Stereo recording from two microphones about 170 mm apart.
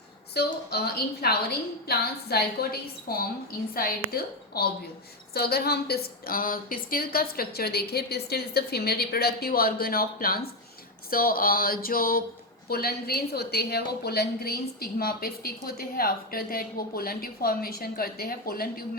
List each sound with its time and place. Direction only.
0.3 s a woman's voice: 70° left (ahead or behind)